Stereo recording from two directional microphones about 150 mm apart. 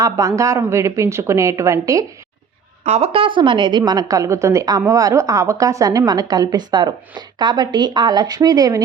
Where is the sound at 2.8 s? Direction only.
45° right (ahead or behind).